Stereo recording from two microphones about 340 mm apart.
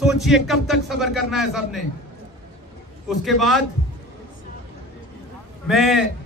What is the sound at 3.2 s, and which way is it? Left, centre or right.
Speech, centre.